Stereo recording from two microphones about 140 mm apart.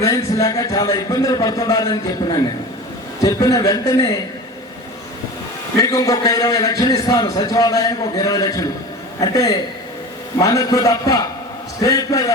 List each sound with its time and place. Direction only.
0.0 s a man's voice: 25° left (ahead or behind)
5.8 s a man's voice: 25° left (ahead or behind)